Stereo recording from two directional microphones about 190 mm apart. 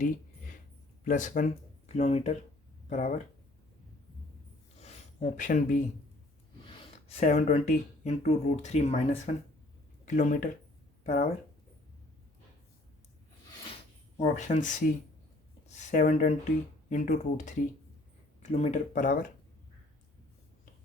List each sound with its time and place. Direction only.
1.0 s speech: 40° left (ahead or behind)
4.8 s a sound: 40° left (ahead or behind)
7.1 s speech: 35° left (ahead or behind)
14.2 s speech: 40° left (ahead or behind)
18.5 s speech: 35° left (ahead or behind)